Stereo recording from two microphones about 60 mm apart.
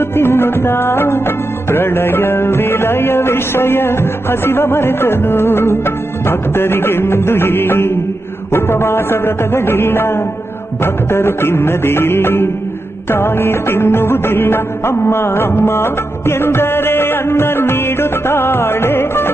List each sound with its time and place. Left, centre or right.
0.0 s music: left
1.7 s music of bollywood: left